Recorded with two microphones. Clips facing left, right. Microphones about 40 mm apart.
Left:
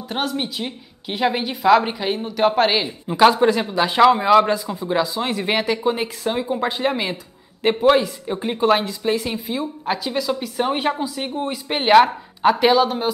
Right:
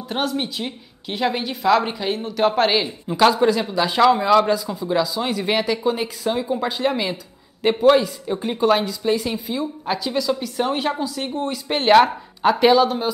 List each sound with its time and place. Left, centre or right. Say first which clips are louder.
0.1 s a man's voice: right 1 dB; centre